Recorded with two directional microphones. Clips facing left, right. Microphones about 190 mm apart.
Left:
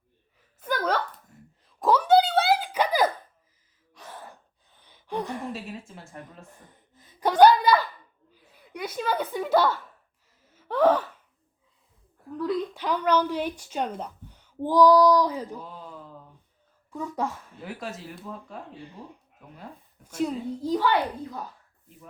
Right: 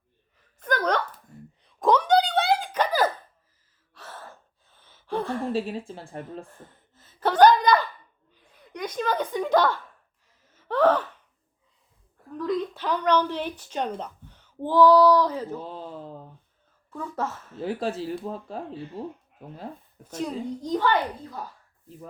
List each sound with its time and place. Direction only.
0.6 s a sound: 5° left (ahead or behind)
3.9 s gasp: 15° left (ahead or behind)
5.5 s a woman's voice: 30° right (ahead or behind)
6.5 s a sound: 15° left (ahead or behind)
10.4 s gasp: 10° left (ahead or behind)
12.4 s a woman's voice: 10° left (ahead or behind)
15.5 s a sound: 30° right (ahead or behind)
16.9 s a child's voice: 15° left (ahead or behind)
17.6 s a woman's voice: 30° right (ahead or behind)
20.1 s a child's voice: 10° left (ahead or behind)